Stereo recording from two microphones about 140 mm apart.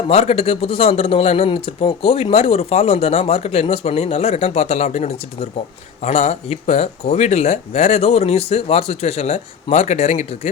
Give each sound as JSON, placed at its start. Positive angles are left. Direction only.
{"t": 0.1, "sound": "speech", "side_deg": 45}